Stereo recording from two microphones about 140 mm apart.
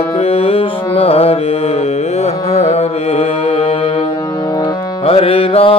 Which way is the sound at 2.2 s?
50° left (ahead or behind).